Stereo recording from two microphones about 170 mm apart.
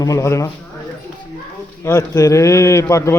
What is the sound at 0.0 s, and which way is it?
Speech, 20° left (ahead or behind).